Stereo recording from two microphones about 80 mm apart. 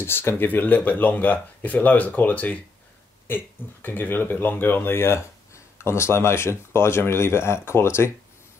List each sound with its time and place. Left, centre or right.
0.0 s speech: left